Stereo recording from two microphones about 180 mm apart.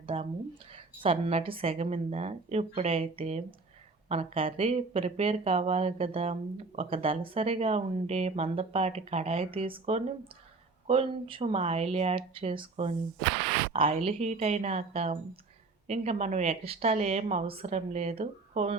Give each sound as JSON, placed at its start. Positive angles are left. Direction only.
{"t": 0.0, "sound": "speech", "side_deg": -30}